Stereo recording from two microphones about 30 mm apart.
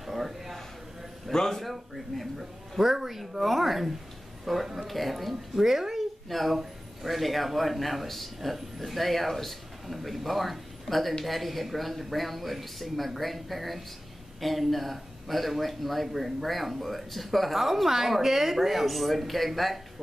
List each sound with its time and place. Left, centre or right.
0.0 s a sound: centre
1.3 s speech: centre
1.6 s speech: centre
5.3 s speech: centre